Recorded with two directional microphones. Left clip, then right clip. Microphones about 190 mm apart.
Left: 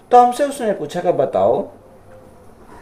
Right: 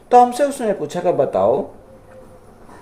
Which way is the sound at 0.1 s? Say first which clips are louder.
Left 1 dB; 10° right (ahead or behind).